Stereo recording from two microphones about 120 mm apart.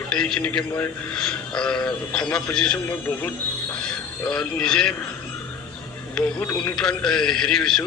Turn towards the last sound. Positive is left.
turn(degrees=5)  # may be behind; listen again after turning